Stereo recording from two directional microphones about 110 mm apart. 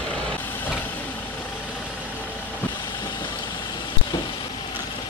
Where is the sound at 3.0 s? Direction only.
45° left (ahead or behind).